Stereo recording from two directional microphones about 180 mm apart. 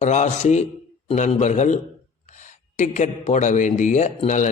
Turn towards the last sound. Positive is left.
turn(degrees=40)  # may be behind; listen again after turning